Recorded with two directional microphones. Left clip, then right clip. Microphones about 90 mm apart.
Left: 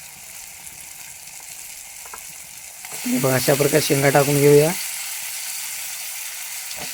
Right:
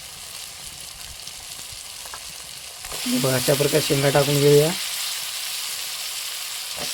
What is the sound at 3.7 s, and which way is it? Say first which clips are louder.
Speech: left 2 dB; 60° left (ahead or behind).